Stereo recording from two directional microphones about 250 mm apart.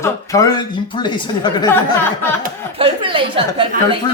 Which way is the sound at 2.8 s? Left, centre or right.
Right.